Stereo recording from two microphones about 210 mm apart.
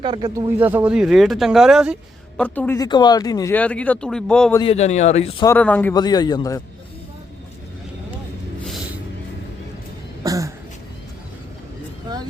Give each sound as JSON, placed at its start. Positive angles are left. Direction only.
{"t": 0.0, "sound": "speech", "side_deg": -20}
{"t": 0.6, "sound": "speech", "side_deg": -10}
{"t": 2.4, "sound": "speech", "side_deg": 10}
{"t": 4.6, "sound": "speech", "side_deg": 30}
{"t": 5.5, "sound": "speech", "side_deg": 5}
{"t": 5.9, "sound": "a man's voice", "side_deg": 20}
{"t": 10.2, "sound": "a sound", "side_deg": -15}